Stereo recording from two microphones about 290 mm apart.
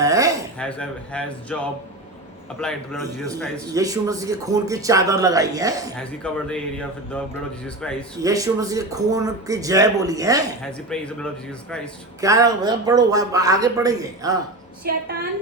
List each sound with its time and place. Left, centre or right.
0.0 s a sound: centre
0.6 s speech: centre
3.8 s a man's voice: centre
6.0 s speech: centre
8.2 s a man's voice: centre
10.6 s speech: centre
12.2 s a man's voice: centre
14.8 s a woman's voice: right